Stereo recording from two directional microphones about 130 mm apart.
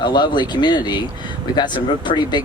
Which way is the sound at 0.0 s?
35° left (ahead or behind).